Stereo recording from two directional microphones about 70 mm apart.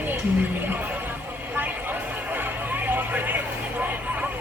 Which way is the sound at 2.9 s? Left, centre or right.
Right.